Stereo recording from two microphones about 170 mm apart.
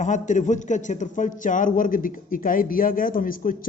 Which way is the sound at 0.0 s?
45° left (ahead or behind).